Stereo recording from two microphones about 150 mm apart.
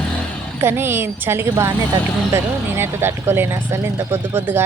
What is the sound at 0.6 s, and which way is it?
A woman's voice, 15° right (ahead or behind).